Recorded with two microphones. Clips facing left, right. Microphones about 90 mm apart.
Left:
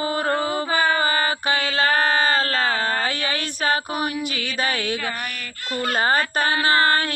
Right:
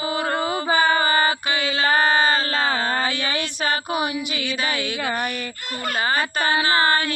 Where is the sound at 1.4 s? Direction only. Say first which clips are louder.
Left 1 dB; 45° left (ahead or behind).